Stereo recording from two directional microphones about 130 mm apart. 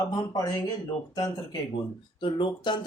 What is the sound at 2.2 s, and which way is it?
Speech, 40° left (ahead or behind).